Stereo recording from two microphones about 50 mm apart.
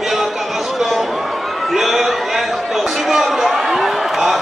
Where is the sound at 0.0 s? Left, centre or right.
Centre.